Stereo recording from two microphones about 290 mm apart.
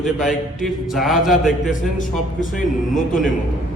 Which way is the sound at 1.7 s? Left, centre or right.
Left.